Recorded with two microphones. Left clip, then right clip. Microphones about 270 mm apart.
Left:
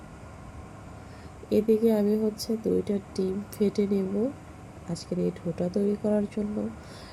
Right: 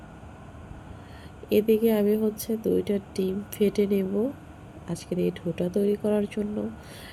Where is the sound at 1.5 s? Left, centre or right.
Centre.